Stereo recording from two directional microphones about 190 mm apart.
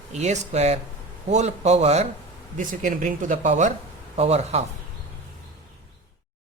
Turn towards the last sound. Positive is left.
turn(degrees=-35)  # may be behind; listen again after turning